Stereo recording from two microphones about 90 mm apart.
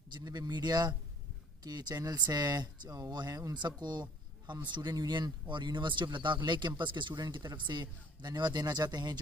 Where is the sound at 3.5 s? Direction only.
55° right (ahead or behind).